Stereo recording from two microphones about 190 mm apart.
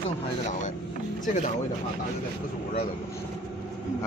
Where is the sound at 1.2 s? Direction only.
40° left (ahead or behind).